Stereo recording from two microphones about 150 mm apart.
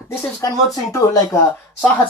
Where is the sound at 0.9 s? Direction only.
20° left (ahead or behind).